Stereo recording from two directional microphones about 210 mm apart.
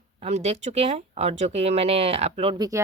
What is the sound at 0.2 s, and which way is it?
Speech, 30° right (ahead or behind).